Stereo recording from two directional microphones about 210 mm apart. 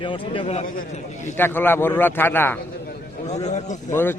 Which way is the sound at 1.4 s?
10° left (ahead or behind).